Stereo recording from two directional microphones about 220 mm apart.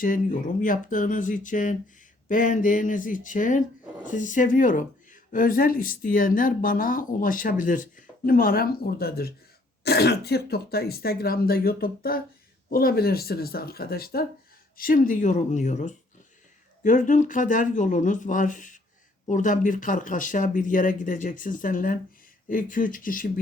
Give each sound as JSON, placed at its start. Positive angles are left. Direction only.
{"t": 0.0, "sound": "speech", "side_deg": 35}